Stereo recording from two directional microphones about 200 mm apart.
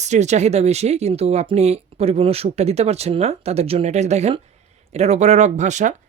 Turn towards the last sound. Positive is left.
turn(degrees=-35)  # may be behind; listen again after turning